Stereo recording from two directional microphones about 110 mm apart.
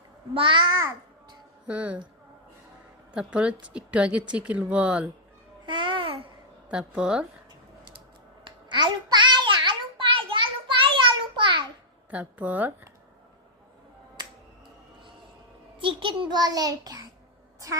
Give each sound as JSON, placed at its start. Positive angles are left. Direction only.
{"t": 0.3, "sound": "a child's voice", "side_deg": -50}
{"t": 1.6, "sound": "a woman's voice", "side_deg": -10}
{"t": 3.2, "sound": "a woman's voice", "side_deg": -10}
{"t": 5.6, "sound": "babbling", "side_deg": -45}
{"t": 6.7, "sound": "a woman's voice", "side_deg": -10}
{"t": 8.4, "sound": "child singing", "side_deg": -45}
{"t": 12.1, "sound": "a woman's voice", "side_deg": -15}
{"t": 15.8, "sound": "a child's voice", "side_deg": -50}